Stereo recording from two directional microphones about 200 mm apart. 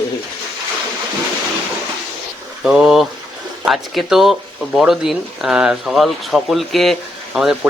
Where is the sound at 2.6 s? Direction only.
5° right (ahead or behind).